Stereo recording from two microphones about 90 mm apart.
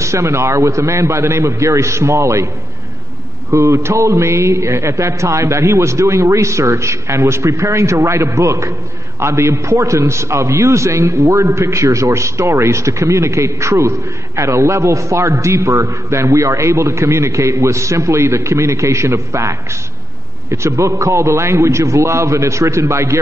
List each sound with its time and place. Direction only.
0.0 s a man's voice: 30° right (ahead or behind)
3.5 s a man's voice: 30° right (ahead or behind)